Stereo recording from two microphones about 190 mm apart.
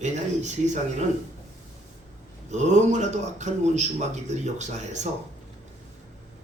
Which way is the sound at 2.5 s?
40° right (ahead or behind).